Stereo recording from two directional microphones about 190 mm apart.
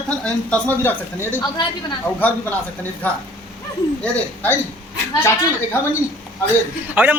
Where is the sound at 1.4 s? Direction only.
25° left (ahead or behind).